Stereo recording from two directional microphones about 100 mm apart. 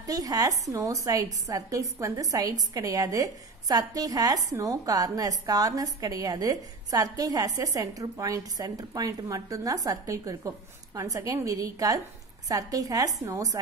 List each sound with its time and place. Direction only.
0.0 s a woman's voice: 35° right (ahead or behind)